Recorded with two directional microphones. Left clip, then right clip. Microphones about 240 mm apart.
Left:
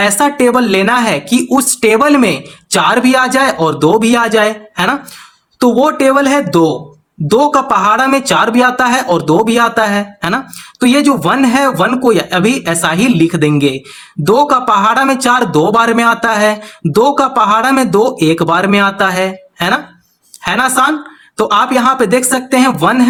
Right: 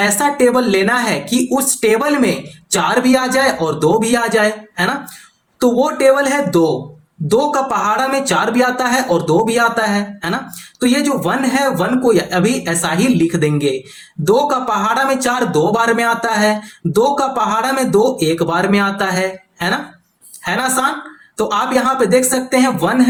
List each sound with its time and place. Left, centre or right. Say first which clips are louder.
0.0 s speech: left 3 dB; left